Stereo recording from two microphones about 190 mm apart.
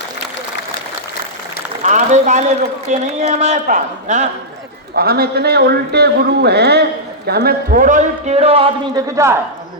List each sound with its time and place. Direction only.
1.8 s a man's voice: 40° right (ahead or behind)
4.9 s a man's voice: 55° right (ahead or behind); by 8.7 s 30° right (ahead or behind)
9.0 s a man's voice: 15° right (ahead or behind)